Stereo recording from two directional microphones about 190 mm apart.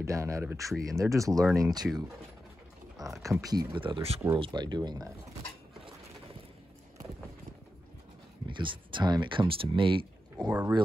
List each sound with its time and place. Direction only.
0.0 s speech: 15° right (ahead or behind)
3.2 s speech: 15° right (ahead or behind)
8.5 s speech: 25° right (ahead or behind)